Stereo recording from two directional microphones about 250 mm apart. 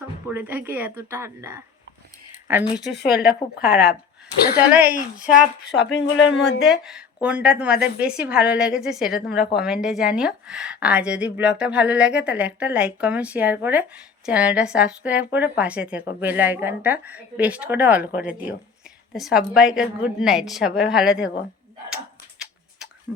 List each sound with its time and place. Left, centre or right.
0.3 s a woman's voice: centre
2.7 s a woman's voice: centre
5.3 s speech: left
6.6 s a woman's voice: centre